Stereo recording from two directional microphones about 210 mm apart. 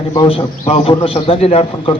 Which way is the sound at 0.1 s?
25° left (ahead or behind).